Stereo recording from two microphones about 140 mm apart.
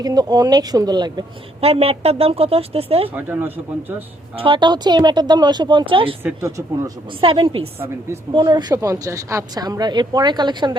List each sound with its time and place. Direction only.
0.0 s a woman's voice: 30° right (ahead or behind)
1.6 s a woman's voice: 45° right (ahead or behind)
3.1 s speech: 15° right (ahead or behind)
4.4 s speech: 35° right (ahead or behind)
6.2 s a woman's voice: 20° right (ahead or behind)
7.1 s a woman's voice: 40° right (ahead or behind)